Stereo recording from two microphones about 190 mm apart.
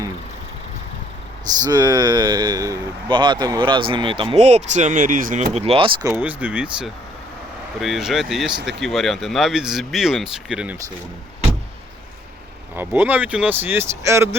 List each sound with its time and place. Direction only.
1.6 s speech: 20° right (ahead or behind); by 5.5 s 45° right (ahead or behind)
5.5 s speech: 30° right (ahead or behind)
6.1 s speech: 10° right (ahead or behind)
12.7 s speech: 10° right (ahead or behind)